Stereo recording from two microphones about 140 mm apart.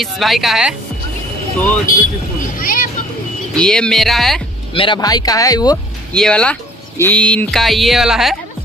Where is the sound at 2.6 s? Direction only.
90° left.